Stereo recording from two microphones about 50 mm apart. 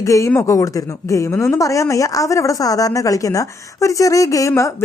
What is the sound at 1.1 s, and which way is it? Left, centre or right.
A woman's voice, left.